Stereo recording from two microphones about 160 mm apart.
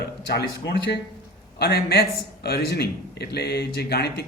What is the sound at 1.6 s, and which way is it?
A man's voice, 80° left.